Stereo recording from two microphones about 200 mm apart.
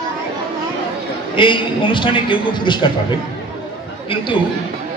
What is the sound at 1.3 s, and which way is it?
A man's voice, 25° left (ahead or behind).